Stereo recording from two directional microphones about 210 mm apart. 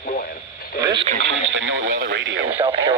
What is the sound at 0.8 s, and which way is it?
Radio, 20° right (ahead or behind).